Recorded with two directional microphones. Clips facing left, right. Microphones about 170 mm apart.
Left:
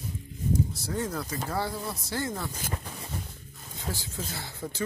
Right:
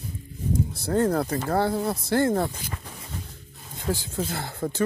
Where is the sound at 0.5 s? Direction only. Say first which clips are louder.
Right 6 dB; 60° right (ahead or behind).